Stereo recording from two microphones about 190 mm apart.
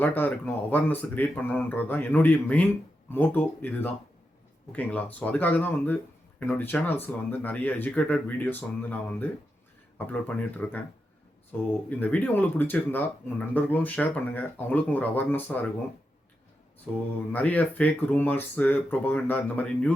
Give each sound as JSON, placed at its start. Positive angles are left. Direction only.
{"t": 0.0, "sound": "speech", "side_deg": 10}
{"t": 17.3, "sound": "speech", "side_deg": 10}